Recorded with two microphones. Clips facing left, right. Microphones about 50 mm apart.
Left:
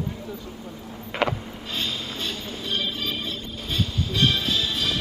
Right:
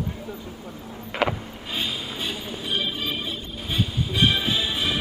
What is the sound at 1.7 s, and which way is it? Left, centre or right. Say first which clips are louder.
Music: right 1 dB; centre.